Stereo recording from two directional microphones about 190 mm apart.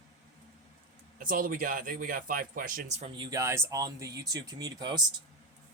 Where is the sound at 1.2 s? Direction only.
45° right (ahead or behind).